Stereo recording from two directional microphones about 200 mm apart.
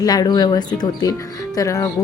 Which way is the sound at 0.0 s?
20° left (ahead or behind).